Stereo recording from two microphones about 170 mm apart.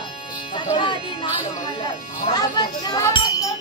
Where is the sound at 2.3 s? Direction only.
25° left (ahead or behind).